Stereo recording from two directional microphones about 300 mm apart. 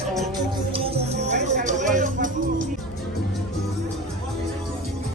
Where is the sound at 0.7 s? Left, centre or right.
Centre.